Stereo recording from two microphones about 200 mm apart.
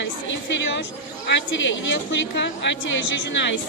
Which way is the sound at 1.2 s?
65° left (ahead or behind).